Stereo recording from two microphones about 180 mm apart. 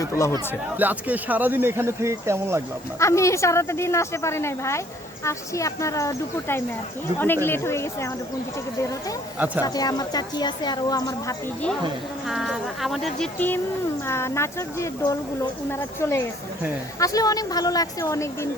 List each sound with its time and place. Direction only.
0.8 s speech: 10° right (ahead or behind)
3.0 s a woman's voice: 15° left (ahead or behind)
9.6 s speech: 20° left (ahead or behind)
12.3 s a woman's voice: centre (ahead or behind); by 18.3 s 15° left (ahead or behind)